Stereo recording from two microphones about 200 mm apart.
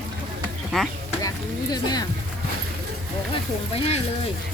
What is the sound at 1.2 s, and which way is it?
Speech, 20° left (ahead or behind).